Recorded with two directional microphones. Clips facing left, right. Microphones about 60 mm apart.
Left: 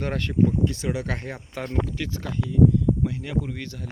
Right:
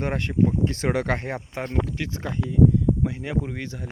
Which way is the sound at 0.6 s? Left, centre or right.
Right.